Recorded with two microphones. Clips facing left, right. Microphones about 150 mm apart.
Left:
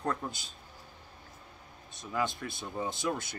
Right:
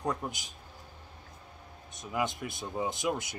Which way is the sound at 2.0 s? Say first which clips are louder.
Right 1 dB; 20° right (ahead or behind).